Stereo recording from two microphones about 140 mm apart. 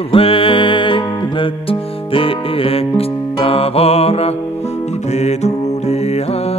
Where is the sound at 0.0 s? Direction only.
40° left (ahead or behind).